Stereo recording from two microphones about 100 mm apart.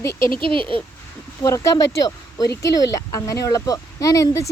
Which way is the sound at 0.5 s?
60° right (ahead or behind).